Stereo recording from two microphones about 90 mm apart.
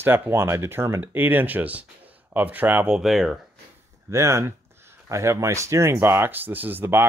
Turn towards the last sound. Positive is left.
turn(degrees=-25)  # may be behind; listen again after turning